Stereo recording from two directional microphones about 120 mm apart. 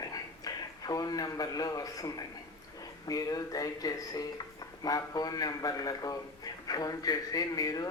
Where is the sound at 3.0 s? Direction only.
30° left (ahead or behind).